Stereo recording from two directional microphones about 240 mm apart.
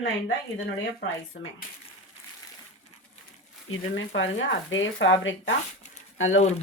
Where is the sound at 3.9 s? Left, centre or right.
Left.